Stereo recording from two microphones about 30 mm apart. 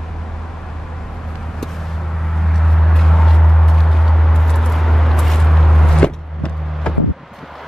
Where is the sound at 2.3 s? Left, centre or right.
Centre.